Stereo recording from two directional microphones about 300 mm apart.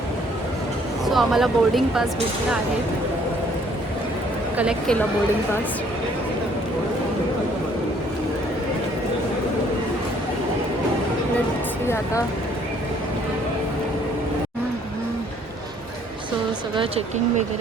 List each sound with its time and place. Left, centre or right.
1.0 s speech: centre
4.5 s speech: centre
16.7 s speech: centre